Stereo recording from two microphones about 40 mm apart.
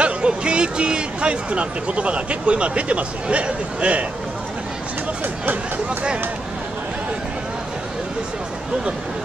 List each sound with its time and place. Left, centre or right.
0.0 s speech: right